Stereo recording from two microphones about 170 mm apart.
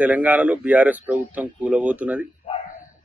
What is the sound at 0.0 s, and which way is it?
Speech, 10° right (ahead or behind).